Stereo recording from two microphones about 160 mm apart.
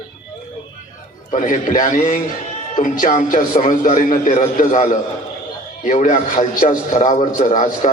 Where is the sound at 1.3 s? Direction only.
55° left (ahead or behind).